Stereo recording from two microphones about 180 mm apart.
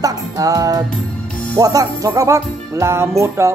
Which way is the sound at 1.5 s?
20° right (ahead or behind).